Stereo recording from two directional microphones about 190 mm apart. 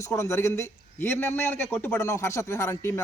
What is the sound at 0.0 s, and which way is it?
A man's voice, 15° left (ahead or behind).